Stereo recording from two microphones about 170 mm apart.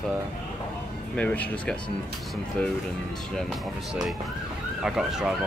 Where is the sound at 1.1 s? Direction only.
10° left (ahead or behind).